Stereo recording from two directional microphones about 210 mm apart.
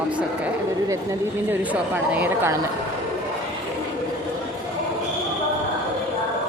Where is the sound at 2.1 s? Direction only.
5° right (ahead or behind).